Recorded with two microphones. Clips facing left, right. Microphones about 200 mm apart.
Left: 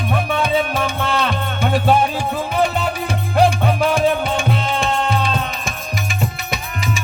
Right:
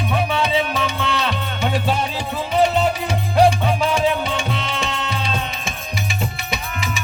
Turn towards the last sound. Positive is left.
turn(degrees=50)  # may be behind; listen again after turning